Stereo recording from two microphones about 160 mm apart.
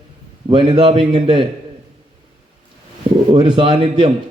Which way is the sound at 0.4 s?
30° right (ahead or behind).